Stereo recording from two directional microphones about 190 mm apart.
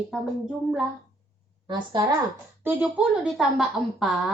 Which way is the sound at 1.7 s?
25° right (ahead or behind).